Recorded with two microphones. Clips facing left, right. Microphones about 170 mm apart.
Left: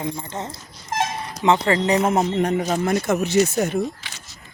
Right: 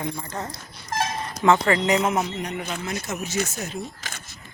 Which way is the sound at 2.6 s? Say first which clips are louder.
Left 9 dB; 50° left (ahead or behind).